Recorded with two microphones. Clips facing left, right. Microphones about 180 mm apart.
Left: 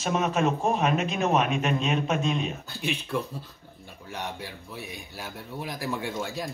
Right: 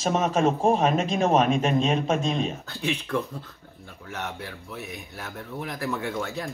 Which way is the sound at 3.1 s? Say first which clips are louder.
Right 2 dB; 10° left (ahead or behind).